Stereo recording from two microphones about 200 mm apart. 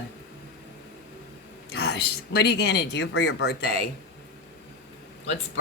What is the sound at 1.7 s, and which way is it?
Speech, 55° left (ahead or behind).